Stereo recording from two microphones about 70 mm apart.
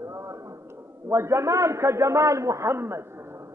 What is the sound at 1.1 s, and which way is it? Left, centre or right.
A man's voice, right.